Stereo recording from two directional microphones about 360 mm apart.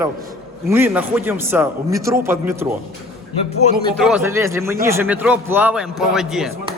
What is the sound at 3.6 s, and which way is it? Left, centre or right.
Speech, centre.